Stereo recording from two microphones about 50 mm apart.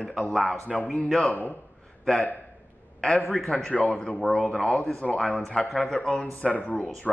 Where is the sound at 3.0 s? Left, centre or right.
Centre.